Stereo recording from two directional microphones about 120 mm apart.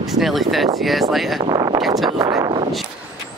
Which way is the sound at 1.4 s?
35° right (ahead or behind).